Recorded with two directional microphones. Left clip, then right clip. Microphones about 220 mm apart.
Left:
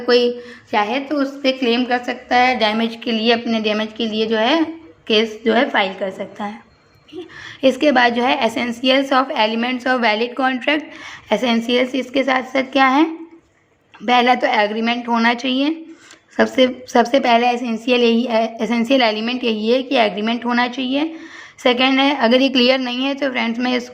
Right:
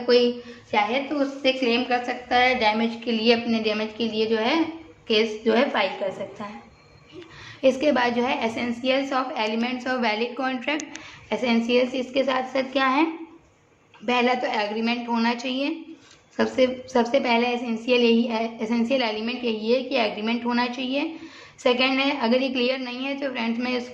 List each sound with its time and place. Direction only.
0.0 s a woman's voice: 45° left (ahead or behind)
7.6 s a woman's voice: 40° left (ahead or behind)
11.3 s a woman's voice: 45° left (ahead or behind)